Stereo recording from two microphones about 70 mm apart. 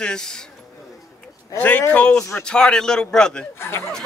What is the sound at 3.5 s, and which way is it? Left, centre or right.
Speech, left.